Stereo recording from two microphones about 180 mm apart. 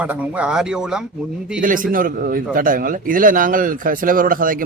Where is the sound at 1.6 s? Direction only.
50° right (ahead or behind).